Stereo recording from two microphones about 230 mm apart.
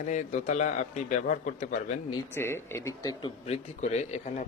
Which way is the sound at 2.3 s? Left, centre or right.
Centre.